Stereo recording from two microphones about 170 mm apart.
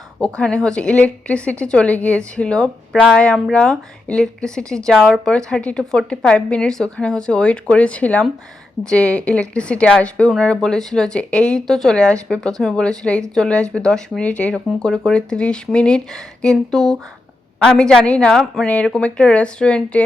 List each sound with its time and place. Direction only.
0.2 s speech: 5° left (ahead or behind)